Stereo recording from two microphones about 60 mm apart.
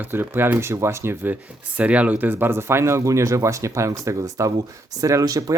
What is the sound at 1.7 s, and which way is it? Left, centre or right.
Speech, right.